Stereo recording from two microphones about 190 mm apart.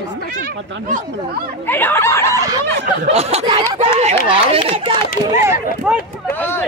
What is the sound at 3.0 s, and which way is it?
Speech, 30° right (ahead or behind).